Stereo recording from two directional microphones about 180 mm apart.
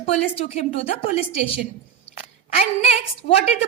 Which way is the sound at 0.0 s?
35° left (ahead or behind).